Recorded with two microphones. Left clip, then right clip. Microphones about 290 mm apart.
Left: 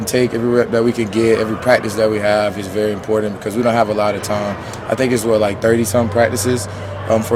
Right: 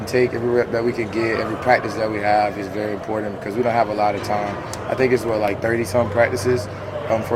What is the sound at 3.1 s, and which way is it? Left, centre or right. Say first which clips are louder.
Speech: left 9 dB; left.